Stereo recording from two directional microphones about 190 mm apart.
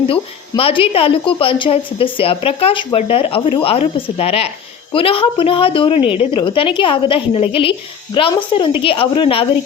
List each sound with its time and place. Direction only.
0.1 s a woman's voice: 30° left (ahead or behind)